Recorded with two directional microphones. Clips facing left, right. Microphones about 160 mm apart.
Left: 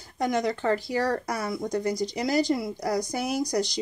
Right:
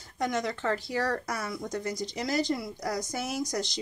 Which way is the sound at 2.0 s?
Centre (ahead or behind).